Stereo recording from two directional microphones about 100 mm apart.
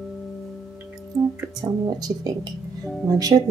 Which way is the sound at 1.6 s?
45° right (ahead or behind).